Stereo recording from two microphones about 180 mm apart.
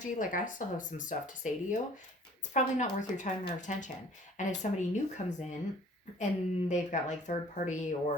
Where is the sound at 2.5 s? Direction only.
45° left (ahead or behind).